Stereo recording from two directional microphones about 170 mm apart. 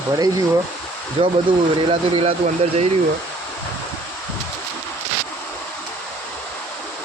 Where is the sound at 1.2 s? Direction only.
30° right (ahead or behind).